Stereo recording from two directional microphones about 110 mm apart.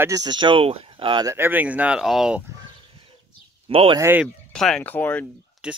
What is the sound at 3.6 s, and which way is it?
Speech, 50° right (ahead or behind).